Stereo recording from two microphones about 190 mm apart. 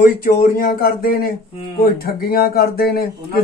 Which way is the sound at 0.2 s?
50° left (ahead or behind).